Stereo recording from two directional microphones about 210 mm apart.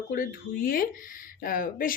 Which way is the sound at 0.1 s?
45° left (ahead or behind).